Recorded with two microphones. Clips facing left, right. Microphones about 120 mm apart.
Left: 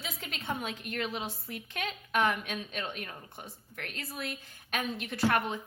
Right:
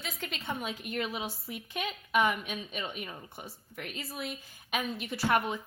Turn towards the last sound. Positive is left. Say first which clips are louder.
# even
turn(degrees=-10)  # may be behind; listen again after turning